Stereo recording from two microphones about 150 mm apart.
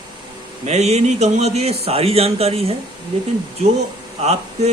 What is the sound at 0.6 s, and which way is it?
Speech, 45° right (ahead or behind).